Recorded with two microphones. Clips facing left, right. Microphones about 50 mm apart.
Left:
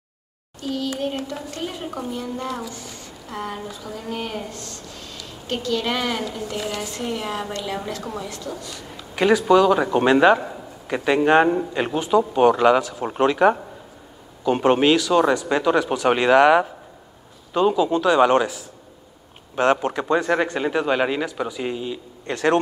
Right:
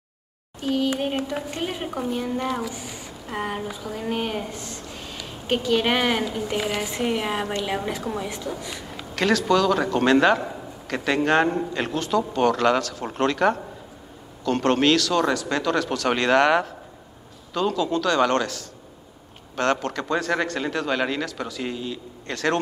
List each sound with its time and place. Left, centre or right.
0.6 s speech: right
1.9 s a child's voice: centre
2.1 s speech: right
9.1 s a man's voice: centre